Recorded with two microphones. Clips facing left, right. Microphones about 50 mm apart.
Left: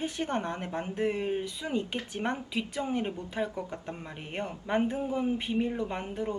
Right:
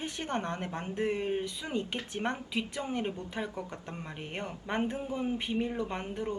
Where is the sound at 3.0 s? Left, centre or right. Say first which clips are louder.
Left 3 dB; centre.